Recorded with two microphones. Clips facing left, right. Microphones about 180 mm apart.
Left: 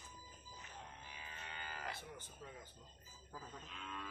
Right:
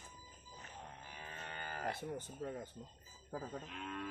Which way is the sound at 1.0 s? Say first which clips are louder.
Right 4 dB; 50° right (ahead or behind).